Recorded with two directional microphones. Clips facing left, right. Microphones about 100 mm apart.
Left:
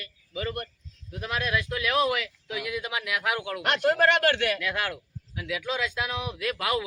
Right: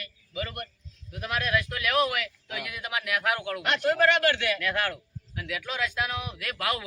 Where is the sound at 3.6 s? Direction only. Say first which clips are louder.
Left 1 dB; 50° left (ahead or behind).